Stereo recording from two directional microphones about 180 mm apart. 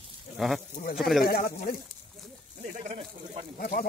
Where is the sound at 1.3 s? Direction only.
55° left (ahead or behind).